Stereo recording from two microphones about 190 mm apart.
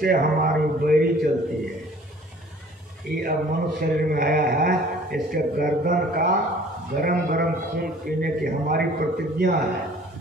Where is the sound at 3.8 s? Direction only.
50° right (ahead or behind).